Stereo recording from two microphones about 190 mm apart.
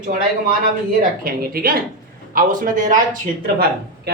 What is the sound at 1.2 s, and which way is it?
Speech, 50° right (ahead or behind).